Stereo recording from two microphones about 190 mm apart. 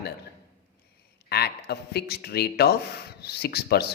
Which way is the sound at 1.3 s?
60° left (ahead or behind).